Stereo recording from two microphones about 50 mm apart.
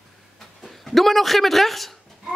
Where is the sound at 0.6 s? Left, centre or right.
Centre.